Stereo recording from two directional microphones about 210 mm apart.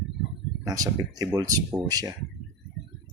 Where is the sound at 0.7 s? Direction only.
15° right (ahead or behind).